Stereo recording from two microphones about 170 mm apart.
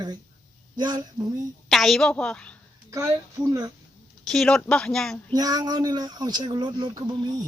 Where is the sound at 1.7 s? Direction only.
Centre (ahead or behind).